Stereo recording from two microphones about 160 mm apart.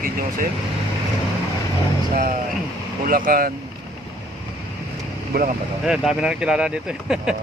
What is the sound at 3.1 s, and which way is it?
Speech, 60° right (ahead or behind).